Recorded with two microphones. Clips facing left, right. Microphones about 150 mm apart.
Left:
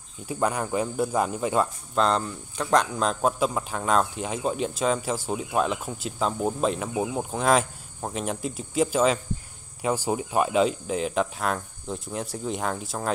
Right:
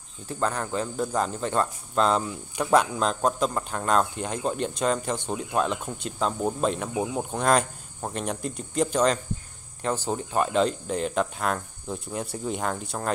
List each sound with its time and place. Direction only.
0.3 s speech: 10° left (ahead or behind)